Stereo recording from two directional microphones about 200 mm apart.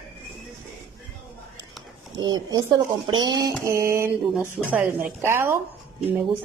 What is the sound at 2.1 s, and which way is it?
Speech, 20° right (ahead or behind).